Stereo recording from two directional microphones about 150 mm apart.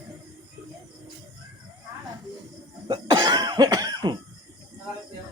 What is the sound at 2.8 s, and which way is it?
Cough, 30° right (ahead or behind).